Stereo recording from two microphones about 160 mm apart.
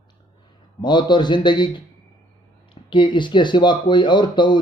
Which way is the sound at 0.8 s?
25° left (ahead or behind).